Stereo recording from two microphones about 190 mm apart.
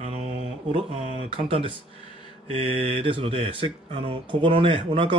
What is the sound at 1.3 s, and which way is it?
Speech, 30° right (ahead or behind).